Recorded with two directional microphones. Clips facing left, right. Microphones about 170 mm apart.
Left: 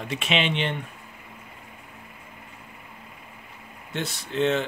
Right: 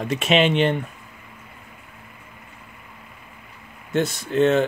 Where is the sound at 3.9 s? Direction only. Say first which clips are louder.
Right 9 dB; 45° right (ahead or behind).